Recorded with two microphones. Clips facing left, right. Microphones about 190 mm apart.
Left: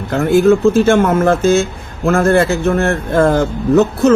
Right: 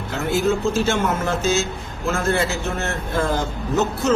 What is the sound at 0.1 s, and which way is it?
A man's voice, 55° left (ahead or behind).